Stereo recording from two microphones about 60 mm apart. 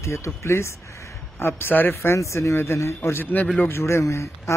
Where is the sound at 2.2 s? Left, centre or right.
Left.